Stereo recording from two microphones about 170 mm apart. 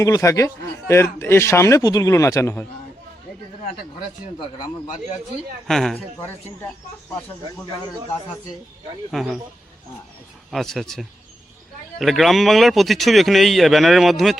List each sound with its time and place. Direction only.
0.0 s a man's voice: 20° left (ahead or behind)
5.6 s a man's voice: centre (ahead or behind)
9.1 s a man's voice: 5° right (ahead or behind)
10.5 s a man's voice: centre (ahead or behind)